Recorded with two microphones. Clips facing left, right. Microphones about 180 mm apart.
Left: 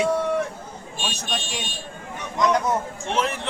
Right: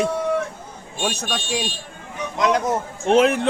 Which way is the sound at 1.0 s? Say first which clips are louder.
Right 5 dB; 60° right (ahead or behind).